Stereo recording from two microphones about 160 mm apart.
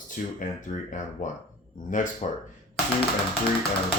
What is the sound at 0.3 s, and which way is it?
Speech, 55° left (ahead or behind).